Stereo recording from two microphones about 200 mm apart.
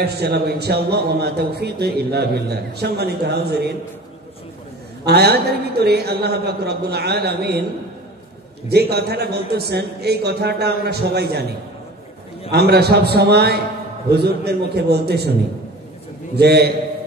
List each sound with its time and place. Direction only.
0.0 s a man's voice: 55° right (ahead or behind)
5.0 s a man's voice: 55° right (ahead or behind)
8.6 s a man's voice: 55° right (ahead or behind)
12.4 s a man's voice: 55° right (ahead or behind)
16.3 s a man's voice: 55° right (ahead or behind)